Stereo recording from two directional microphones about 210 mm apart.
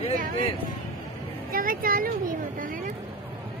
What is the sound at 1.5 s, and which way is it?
Speech, 40° right (ahead or behind).